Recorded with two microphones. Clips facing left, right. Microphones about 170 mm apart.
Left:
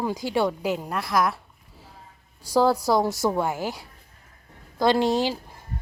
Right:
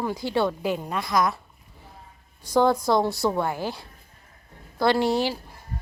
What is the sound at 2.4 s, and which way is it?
A woman's voice, 10° left (ahead or behind).